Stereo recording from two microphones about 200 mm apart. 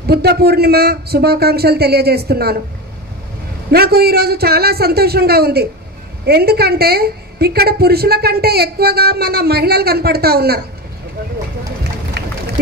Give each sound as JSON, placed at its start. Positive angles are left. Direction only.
{"t": 0.0, "sound": "a woman's voice", "side_deg": -55}
{"t": 3.7, "sound": "a woman's voice", "side_deg": -50}
{"t": 12.2, "sound": "a sound", "side_deg": -55}